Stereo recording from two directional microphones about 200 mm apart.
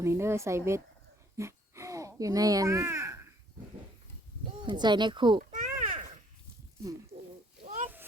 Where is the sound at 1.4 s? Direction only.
15° right (ahead or behind).